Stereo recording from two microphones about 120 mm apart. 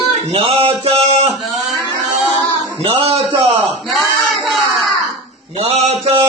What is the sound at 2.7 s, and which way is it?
Speech, 55° right (ahead or behind).